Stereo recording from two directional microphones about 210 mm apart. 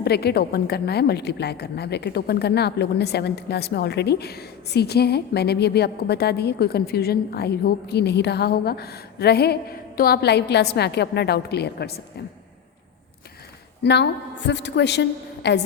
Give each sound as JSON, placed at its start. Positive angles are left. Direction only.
{"t": 0.0, "sound": "a woman's voice", "side_deg": 50}
{"t": 13.8, "sound": "a woman's voice", "side_deg": 55}